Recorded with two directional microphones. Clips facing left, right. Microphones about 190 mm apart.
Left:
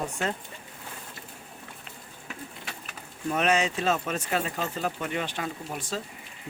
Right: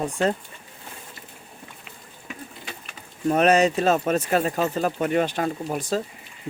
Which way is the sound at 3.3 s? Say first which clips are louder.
Right 7 dB; 40° right (ahead or behind).